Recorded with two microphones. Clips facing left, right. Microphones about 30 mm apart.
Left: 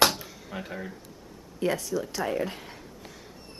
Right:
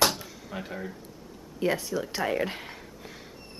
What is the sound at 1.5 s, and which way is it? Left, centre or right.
Speech, centre.